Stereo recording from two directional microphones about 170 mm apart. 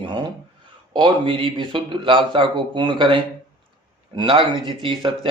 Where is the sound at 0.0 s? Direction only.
25° right (ahead or behind).